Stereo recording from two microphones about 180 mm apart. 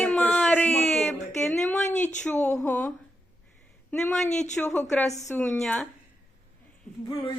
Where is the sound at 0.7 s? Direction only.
40° left (ahead or behind).